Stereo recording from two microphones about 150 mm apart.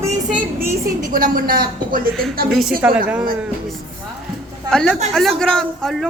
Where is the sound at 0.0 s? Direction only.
15° right (ahead or behind).